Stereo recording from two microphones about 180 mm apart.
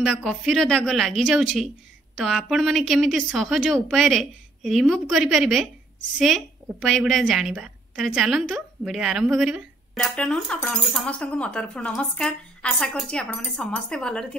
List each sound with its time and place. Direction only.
0.0 s a woman's voice: centre (ahead or behind)